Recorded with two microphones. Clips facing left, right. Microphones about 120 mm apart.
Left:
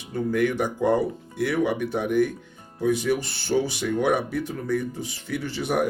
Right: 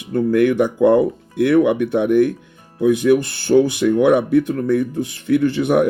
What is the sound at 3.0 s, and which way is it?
Speech, 55° right (ahead or behind).